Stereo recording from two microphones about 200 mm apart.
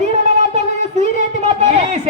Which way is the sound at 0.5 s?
35° right (ahead or behind).